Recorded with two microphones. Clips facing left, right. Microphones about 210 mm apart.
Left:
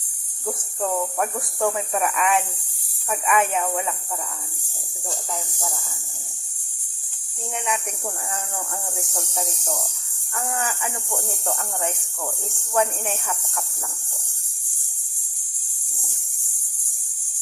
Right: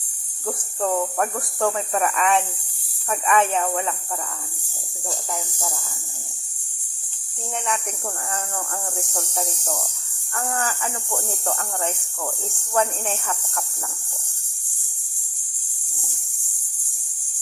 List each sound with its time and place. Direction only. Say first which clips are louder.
0.8 s speech: right 2 dB; 10° left (ahead or behind)
5.5 s speech: right 1 dB; centre (ahead or behind)
10.6 s speech: right 1 dB; 15° left (ahead or behind)
12.7 s speech: even; 15° left (ahead or behind)